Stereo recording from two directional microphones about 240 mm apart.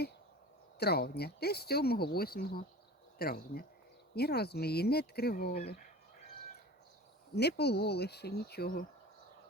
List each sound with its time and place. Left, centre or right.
0.8 s speech: left
7.3 s speech: left